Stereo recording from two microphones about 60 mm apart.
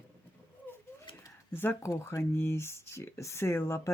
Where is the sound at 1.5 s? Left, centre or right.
Left.